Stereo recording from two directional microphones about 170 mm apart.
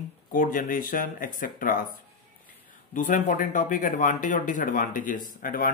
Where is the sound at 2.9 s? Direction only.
50° left (ahead or behind).